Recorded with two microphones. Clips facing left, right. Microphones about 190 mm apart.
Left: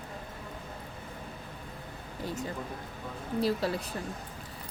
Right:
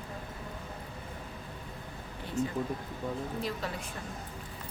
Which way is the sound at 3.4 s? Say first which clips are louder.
Left 7 dB; 35° left (ahead or behind).